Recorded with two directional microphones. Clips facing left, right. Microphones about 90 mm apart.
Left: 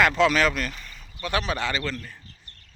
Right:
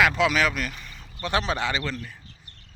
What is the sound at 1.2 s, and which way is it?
Speech, 25° right (ahead or behind).